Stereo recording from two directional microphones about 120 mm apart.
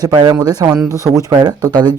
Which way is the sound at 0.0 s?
35° right (ahead or behind).